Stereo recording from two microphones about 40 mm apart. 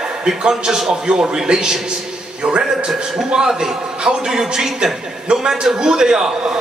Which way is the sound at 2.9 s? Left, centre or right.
Centre.